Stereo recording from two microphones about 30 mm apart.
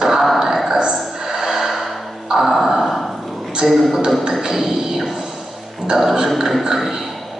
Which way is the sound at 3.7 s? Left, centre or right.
Centre.